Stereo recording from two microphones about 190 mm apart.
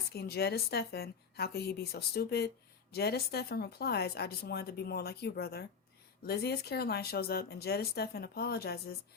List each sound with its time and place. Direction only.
0.1 s speech: 55° left (ahead or behind)